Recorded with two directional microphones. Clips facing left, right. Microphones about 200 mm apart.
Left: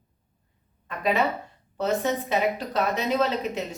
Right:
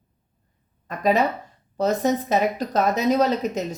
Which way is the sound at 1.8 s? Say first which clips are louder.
Right 4 dB; 40° right (ahead or behind).